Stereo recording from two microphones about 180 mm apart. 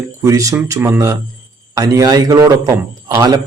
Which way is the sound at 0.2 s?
15° right (ahead or behind).